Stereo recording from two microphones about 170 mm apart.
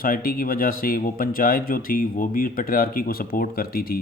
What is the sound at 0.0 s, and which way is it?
Speech, 55° left (ahead or behind).